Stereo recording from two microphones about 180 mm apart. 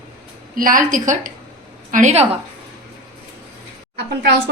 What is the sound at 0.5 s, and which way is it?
A woman's voice, 50° right (ahead or behind).